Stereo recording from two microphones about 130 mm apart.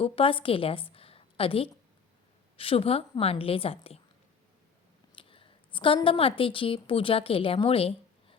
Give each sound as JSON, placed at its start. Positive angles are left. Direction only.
{"t": 0.0, "sound": "a woman's voice", "side_deg": 45}
{"t": 5.1, "sound": "a woman's voice", "side_deg": 45}